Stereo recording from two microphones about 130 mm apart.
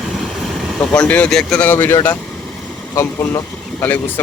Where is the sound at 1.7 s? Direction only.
20° left (ahead or behind).